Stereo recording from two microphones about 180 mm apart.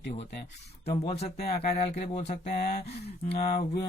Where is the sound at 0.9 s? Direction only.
25° left (ahead or behind).